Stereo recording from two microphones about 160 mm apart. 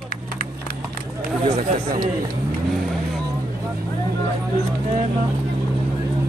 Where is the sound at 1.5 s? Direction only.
40° right (ahead or behind).